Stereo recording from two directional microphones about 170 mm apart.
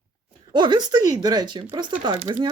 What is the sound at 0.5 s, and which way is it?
Speech, 25° right (ahead or behind).